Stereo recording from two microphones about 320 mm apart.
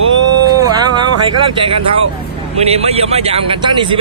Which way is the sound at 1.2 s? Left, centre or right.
Centre.